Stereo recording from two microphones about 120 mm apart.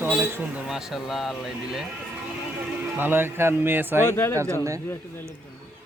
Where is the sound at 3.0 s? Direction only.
20° right (ahead or behind).